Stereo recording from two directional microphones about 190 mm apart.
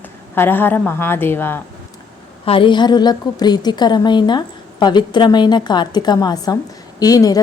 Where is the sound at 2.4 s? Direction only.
30° left (ahead or behind).